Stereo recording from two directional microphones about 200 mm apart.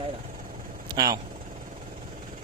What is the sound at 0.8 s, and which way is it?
Vehicle, 20° right (ahead or behind).